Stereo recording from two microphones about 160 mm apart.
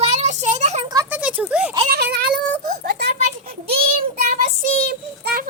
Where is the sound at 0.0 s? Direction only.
45° right (ahead or behind).